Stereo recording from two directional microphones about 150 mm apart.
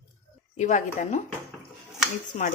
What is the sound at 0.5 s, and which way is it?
Speech, 55° left (ahead or behind).